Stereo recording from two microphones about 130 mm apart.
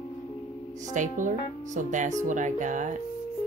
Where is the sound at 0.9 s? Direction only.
75° right (ahead or behind).